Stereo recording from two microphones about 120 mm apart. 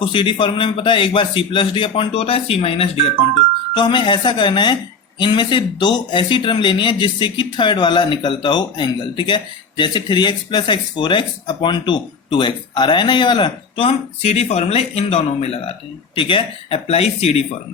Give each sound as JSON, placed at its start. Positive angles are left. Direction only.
{"t": 0.0, "sound": "a man's voice", "side_deg": 45}
{"t": 3.8, "sound": "speech", "side_deg": 40}
{"t": 16.1, "sound": "speech", "side_deg": 45}